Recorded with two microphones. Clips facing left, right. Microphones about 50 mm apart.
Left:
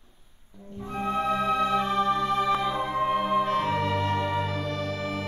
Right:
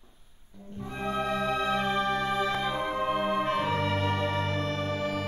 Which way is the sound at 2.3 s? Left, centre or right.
Centre.